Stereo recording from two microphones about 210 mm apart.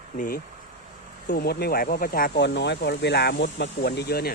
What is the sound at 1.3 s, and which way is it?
Speech, 50° left (ahead or behind).